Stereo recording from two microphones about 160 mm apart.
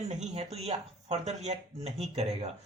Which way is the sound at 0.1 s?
45° right (ahead or behind).